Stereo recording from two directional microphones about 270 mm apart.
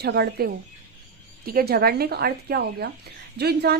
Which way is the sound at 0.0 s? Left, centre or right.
Right.